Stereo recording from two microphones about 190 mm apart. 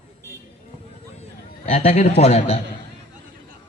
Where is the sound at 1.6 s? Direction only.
35° left (ahead or behind).